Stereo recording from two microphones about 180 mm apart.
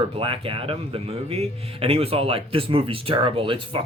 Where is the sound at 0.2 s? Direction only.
30° right (ahead or behind).